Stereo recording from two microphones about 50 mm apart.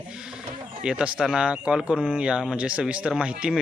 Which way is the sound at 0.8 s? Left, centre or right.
Centre.